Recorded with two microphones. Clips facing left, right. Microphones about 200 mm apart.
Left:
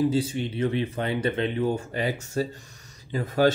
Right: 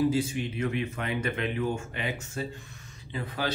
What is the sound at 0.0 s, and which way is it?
Speech, 30° left (ahead or behind).